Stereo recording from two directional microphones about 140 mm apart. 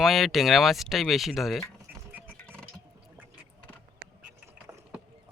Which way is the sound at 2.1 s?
15° right (ahead or behind).